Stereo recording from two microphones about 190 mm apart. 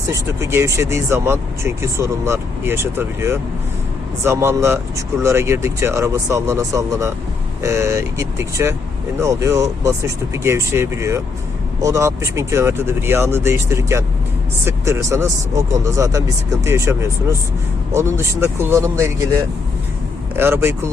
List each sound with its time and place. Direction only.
0.1 s speech: 15° right (ahead or behind)